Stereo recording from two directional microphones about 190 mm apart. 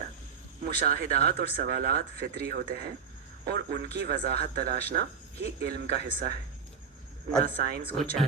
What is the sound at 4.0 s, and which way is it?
Speech, 55° right (ahead or behind).